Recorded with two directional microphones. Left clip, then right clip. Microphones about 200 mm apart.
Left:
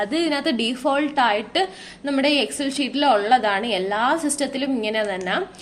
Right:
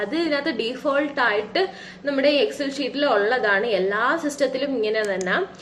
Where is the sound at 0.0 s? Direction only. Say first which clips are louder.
Left 1 dB; 45° left (ahead or behind).